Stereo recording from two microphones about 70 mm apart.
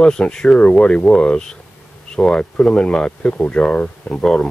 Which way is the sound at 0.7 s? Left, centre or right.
Centre.